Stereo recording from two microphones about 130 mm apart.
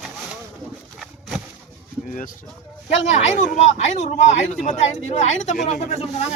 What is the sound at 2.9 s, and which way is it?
Speech, 65° left (ahead or behind).